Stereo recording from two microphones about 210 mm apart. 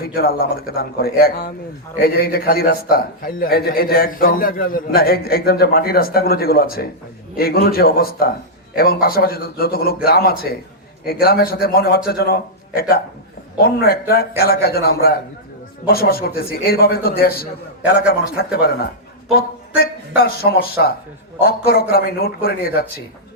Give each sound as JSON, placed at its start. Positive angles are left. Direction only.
{"t": 0.0, "sound": "a man's voice", "side_deg": 45}
{"t": 19.3, "sound": "a man's voice", "side_deg": 45}